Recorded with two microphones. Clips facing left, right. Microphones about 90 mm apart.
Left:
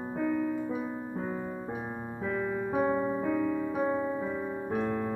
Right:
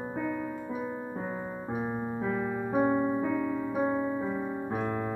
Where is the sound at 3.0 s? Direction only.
10° right (ahead or behind).